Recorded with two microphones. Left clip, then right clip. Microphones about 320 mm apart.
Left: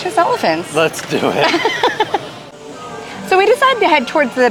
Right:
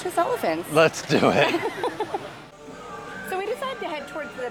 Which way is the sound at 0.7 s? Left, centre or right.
Right.